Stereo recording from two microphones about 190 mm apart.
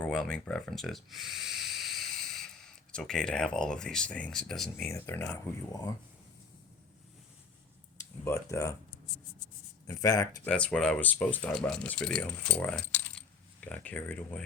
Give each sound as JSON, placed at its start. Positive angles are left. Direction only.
{"t": 0.0, "sound": "speech", "side_deg": 5}
{"t": 4.9, "sound": "speech", "side_deg": 15}
{"t": 8.2, "sound": "speech", "side_deg": 15}
{"t": 9.8, "sound": "speech", "side_deg": 20}
{"t": 10.4, "sound": "speech", "side_deg": 5}